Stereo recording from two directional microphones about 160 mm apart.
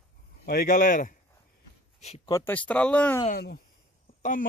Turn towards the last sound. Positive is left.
turn(degrees=55)  # may be behind; listen again after turning